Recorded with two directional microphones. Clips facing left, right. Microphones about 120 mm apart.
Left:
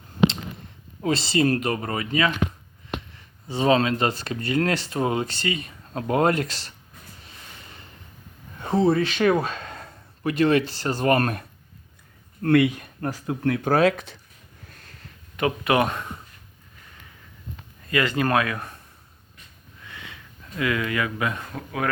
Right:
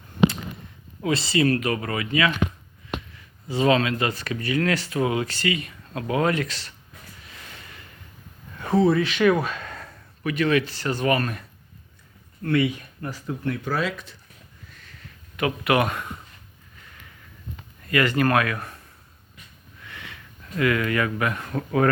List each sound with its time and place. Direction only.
1.0 s speech: 35° left (ahead or behind)
3.4 s speech: 25° left (ahead or behind)
7.2 s a sound: 30° left (ahead or behind)
8.5 s speech: 25° left (ahead or behind)
11.2 s speech: 50° left (ahead or behind)
14.7 s a sound: 45° left (ahead or behind)
15.4 s speech: 25° left (ahead or behind)
17.8 s speech: 20° left (ahead or behind)
19.9 s sniff: 20° left (ahead or behind)
20.6 s speech: 20° left (ahead or behind)
21.5 s speech: centre (ahead or behind)